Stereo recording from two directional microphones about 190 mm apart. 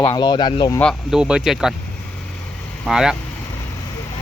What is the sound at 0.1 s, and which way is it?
Speech, 20° left (ahead or behind).